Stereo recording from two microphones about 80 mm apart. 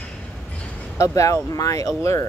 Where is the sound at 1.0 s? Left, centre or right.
Left.